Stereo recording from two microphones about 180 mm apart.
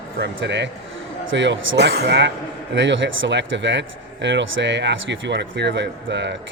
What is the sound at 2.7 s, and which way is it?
Speech, 90° right.